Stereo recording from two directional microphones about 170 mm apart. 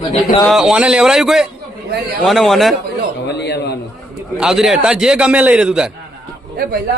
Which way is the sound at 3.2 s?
85° left.